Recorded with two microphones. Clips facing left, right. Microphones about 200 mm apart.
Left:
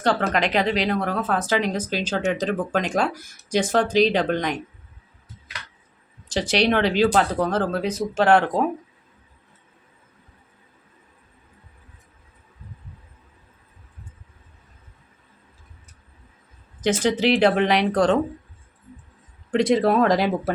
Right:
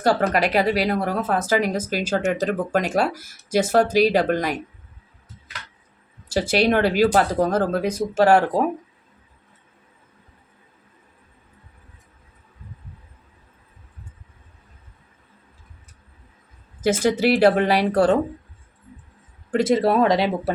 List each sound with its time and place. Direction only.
0.0 s speech: 10° right (ahead or behind)
6.2 s speech: 10° right (ahead or behind)
16.8 s speech: 10° right (ahead or behind)
19.5 s speech: centre (ahead or behind)